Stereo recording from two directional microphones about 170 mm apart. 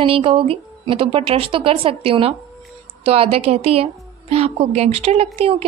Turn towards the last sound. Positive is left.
turn(degrees=-35)  # may be behind; listen again after turning